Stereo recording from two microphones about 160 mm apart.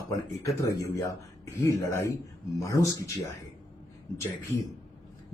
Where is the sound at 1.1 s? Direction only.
20° left (ahead or behind).